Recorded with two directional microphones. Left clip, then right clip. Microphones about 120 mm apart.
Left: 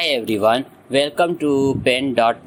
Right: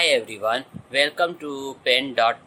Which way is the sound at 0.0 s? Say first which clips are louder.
Left 3 dB; 40° left (ahead or behind).